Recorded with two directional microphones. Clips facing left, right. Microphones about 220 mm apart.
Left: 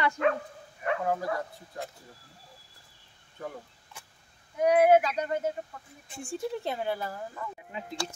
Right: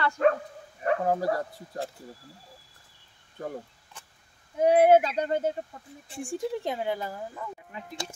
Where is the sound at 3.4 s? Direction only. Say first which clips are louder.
Right 3 dB; 40° right (ahead or behind).